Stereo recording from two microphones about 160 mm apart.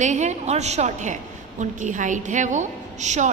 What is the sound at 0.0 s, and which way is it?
A woman's voice, 50° right (ahead or behind).